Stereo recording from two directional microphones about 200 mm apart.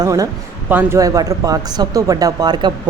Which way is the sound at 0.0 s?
15° right (ahead or behind).